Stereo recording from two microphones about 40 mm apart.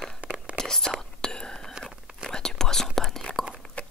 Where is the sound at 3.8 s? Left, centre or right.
Left.